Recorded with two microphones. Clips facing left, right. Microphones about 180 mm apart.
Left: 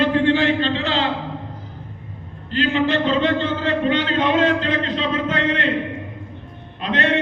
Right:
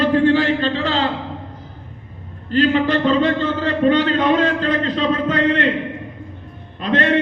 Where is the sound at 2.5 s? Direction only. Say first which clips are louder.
Right 3 dB; 45° right (ahead or behind).